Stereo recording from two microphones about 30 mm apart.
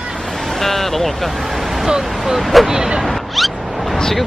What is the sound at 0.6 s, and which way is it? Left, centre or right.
Speech, centre.